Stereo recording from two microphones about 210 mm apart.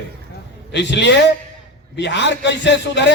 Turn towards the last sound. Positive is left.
turn(degrees=55)  # may be behind; listen again after turning